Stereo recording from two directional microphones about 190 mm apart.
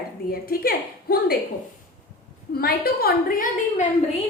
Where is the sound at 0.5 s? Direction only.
50° left (ahead or behind).